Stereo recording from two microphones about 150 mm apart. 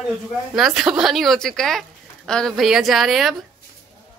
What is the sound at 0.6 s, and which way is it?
A woman's voice, centre (ahead or behind).